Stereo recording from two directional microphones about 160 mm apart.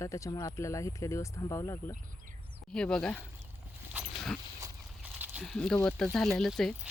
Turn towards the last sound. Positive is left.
turn(degrees=0)  # may be behind; listen again after turning